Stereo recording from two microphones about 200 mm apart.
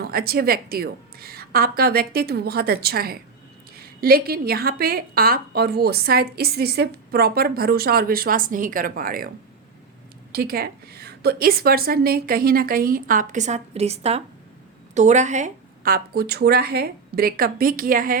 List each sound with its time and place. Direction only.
0.0 s a woman's voice: 50° right (ahead or behind)
10.3 s a woman's voice: 50° right (ahead or behind)